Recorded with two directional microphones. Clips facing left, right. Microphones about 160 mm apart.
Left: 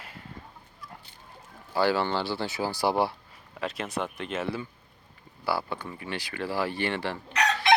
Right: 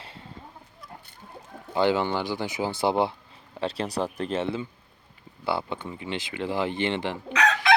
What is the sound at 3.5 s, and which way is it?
Speech, 30° right (ahead or behind).